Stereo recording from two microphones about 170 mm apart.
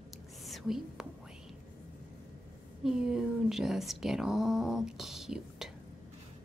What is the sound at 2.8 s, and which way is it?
Speech, 5° right (ahead or behind).